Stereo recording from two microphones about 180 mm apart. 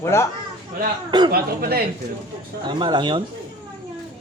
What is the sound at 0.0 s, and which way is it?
Speech, 15° left (ahead or behind).